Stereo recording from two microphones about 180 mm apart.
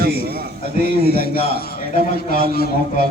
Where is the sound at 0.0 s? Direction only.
60° right (ahead or behind).